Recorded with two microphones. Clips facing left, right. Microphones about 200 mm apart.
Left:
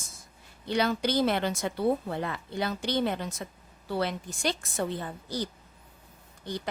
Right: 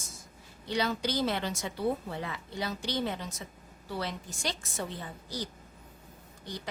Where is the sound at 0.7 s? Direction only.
60° left (ahead or behind).